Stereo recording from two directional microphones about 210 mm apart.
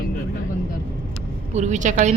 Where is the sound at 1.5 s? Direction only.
35° right (ahead or behind).